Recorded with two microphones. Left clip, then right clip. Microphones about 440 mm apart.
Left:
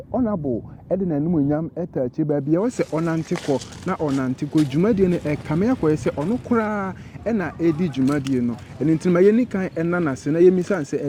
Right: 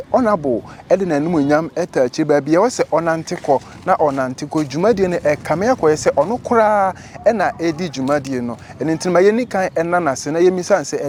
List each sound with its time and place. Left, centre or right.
0.1 s speech: centre
2.6 s speech: right